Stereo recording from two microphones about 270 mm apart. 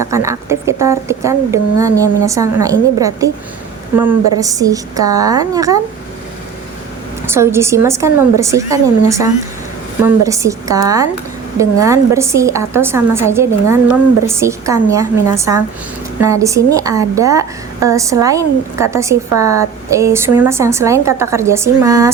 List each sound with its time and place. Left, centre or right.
0.0 s a woman's voice: centre
4.4 s a woman's voice: centre
7.3 s a woman's voice: centre